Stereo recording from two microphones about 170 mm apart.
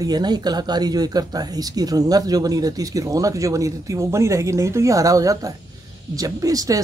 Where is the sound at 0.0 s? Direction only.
25° right (ahead or behind).